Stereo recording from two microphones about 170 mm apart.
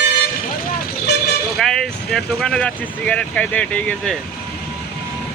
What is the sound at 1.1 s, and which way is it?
Vehicle, 75° left (ahead or behind).